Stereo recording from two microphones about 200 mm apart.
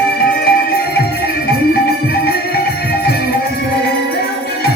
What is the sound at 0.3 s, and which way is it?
Music, 50° left (ahead or behind).